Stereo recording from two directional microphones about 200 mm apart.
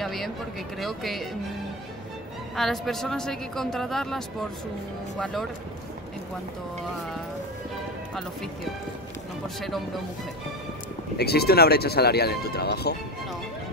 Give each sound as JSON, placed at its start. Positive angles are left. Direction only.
{"t": 0.0, "sound": "a sound", "side_deg": 0}
{"t": 0.7, "sound": "a man's voice", "side_deg": 0}
{"t": 2.5, "sound": "a man's voice", "side_deg": 0}
{"t": 11.1, "sound": "speech", "side_deg": 50}